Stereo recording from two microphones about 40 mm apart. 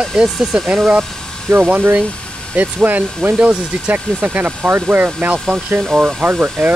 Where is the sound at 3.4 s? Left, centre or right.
Right.